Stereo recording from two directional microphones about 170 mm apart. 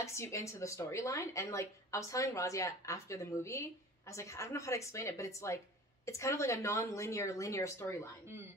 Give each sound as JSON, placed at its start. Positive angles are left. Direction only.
{"t": 0.0, "sound": "speech", "side_deg": 15}